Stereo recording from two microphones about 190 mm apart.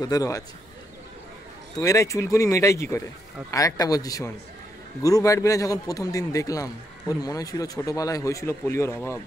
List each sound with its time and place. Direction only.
0.0 s a man's voice: 20° left (ahead or behind)
1.8 s a man's voice: 15° left (ahead or behind)